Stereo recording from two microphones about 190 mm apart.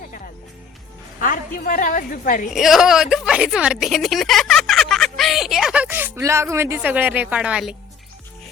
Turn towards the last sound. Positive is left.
turn(degrees=-5)  # may be behind; listen again after turning